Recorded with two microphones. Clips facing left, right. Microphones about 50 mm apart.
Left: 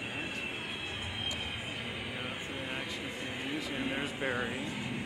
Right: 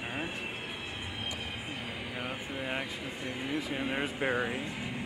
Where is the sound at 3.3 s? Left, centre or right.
Centre.